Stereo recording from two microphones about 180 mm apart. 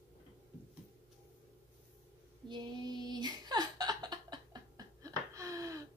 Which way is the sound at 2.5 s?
25° right (ahead or behind).